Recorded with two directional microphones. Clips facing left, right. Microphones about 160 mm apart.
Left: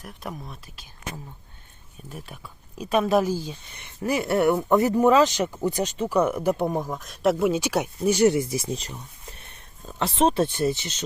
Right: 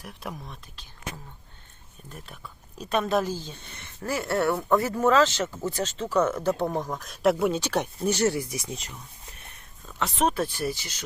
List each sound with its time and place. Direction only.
0.0 s speech: centre (ahead or behind)
2.0 s speech: 5° left (ahead or behind); by 11.0 s 25° left (ahead or behind)